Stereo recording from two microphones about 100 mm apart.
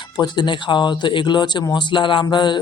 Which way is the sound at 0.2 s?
50° left (ahead or behind).